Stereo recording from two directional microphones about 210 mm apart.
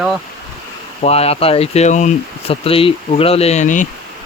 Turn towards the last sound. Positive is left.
turn(degrees=35)  # may be behind; listen again after turning